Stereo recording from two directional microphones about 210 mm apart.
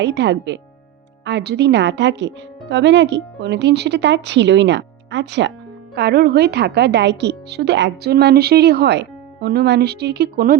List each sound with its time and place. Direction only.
0.0 s speech: 55° right (ahead or behind)